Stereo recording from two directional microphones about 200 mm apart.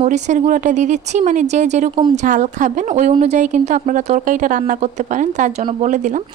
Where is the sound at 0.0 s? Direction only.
35° right (ahead or behind).